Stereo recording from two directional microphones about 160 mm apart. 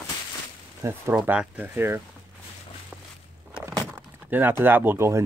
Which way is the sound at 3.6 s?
20° right (ahead or behind).